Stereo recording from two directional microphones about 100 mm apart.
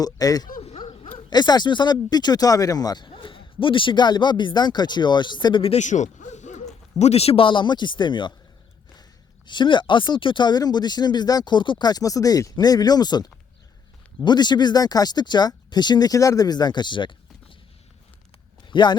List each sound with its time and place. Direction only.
0.0 s speech: 40° left (ahead or behind)
3.1 s speech: 60° left (ahead or behind)
5.9 s a man's voice: 90° left
7.1 s speech: 90° left; by 8.4 s 50° left (ahead or behind)
9.5 s speech: 50° left (ahead or behind)
18.7 s speech: 50° left (ahead or behind)